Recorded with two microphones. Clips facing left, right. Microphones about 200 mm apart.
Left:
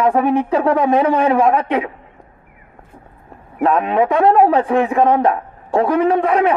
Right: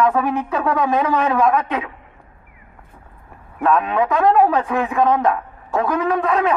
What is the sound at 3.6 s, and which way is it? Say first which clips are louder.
A man's voice: left 3 dB; 30° left (ahead or behind).